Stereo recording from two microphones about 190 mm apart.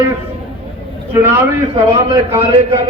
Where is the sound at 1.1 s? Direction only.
15° right (ahead or behind).